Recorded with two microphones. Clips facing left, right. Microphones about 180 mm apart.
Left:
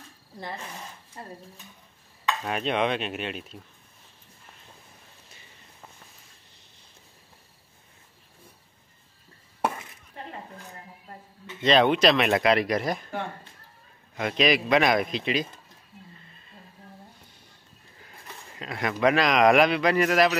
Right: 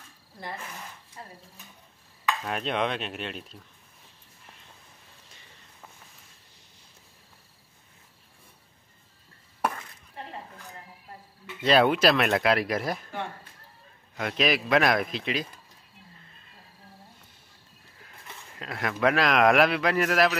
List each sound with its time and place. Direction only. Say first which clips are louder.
2.4 s a man's voice: left 4 dB; centre (ahead or behind)
9.6 s a sound: left 1 dB; 20° left (ahead or behind)
11.6 s a man's voice: left 1 dB; 5° right (ahead or behind)
14.1 s a man's voice: left 3 dB; centre (ahead or behind)
18.6 s a man's voice: left 2 dB; centre (ahead or behind)